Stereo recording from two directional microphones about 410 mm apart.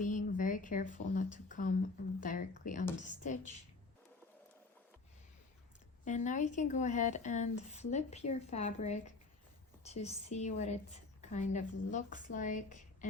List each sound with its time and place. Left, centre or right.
0.0 s a woman's voice: centre
2.2 s a sound: centre
3.2 s a woman's voice: centre
6.1 s a woman's voice: centre